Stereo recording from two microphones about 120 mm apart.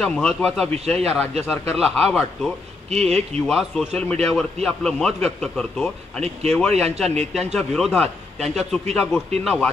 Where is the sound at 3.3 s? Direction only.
Centre (ahead or behind).